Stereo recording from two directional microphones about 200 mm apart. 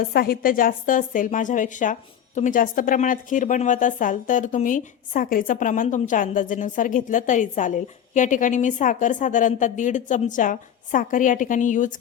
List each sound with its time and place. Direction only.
0.1 s a woman's voice: 50° left (ahead or behind)